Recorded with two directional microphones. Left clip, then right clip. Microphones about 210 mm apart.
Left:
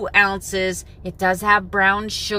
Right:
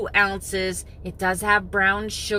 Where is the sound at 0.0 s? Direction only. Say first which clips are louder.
Left 4 dB; 20° left (ahead or behind).